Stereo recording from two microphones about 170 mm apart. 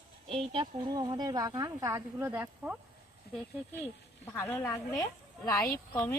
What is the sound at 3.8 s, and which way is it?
A woman's voice, 15° left (ahead or behind).